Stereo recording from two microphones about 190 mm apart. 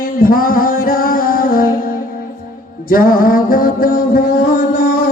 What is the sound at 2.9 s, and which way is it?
Mantra, 50° left (ahead or behind).